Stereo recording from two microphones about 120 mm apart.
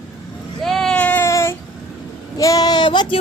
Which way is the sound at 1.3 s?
20° left (ahead or behind).